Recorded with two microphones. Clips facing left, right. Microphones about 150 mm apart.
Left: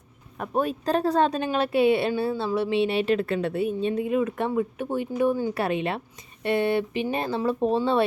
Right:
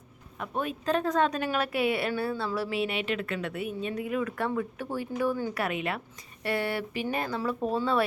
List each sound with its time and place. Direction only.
0.3 s a woman's voice: 40° left (ahead or behind); by 5.5 s 20° left (ahead or behind)
5.5 s a woman's voice: 30° left (ahead or behind)